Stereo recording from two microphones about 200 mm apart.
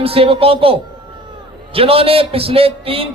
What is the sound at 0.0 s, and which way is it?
A man's voice, 30° right (ahead or behind).